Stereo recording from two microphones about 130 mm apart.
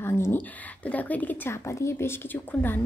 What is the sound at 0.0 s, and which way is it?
A woman's voice, 15° left (ahead or behind).